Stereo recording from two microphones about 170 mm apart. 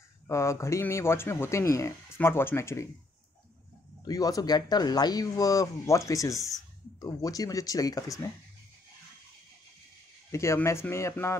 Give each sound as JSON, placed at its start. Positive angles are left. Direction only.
{"t": 0.3, "sound": "speech", "side_deg": 15}
{"t": 4.0, "sound": "speech", "side_deg": 20}
{"t": 10.3, "sound": "speech", "side_deg": 15}